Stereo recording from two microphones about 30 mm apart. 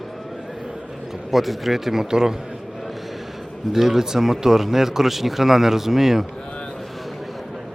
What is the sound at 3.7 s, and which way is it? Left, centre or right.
Speech, centre.